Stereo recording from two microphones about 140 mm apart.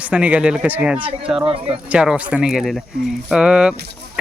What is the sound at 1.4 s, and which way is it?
Speech, 40° right (ahead or behind).